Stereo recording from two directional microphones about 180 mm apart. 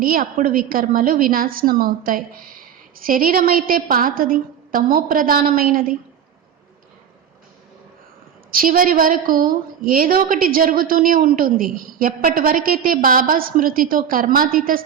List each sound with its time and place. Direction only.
0.0 s a woman's voice: 50° right (ahead or behind)
8.4 s a woman's voice: 50° right (ahead or behind)